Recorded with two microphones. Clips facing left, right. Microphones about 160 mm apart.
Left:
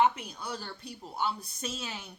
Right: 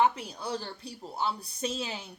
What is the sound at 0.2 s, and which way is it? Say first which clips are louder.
A woman's voice: right 4 dB; 30° right (ahead or behind).